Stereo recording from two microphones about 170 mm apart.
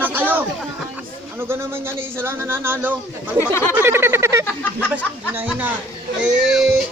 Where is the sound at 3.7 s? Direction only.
15° right (ahead or behind).